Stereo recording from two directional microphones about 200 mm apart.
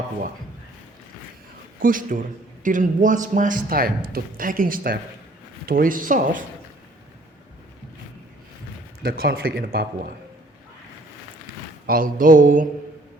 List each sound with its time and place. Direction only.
1.8 s a man's voice: 45° right (ahead or behind)
9.0 s a man's voice: 50° right (ahead or behind)
11.9 s a man's voice: 45° right (ahead or behind)